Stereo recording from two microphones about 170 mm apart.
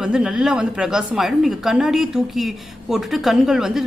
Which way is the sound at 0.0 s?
5° right (ahead or behind).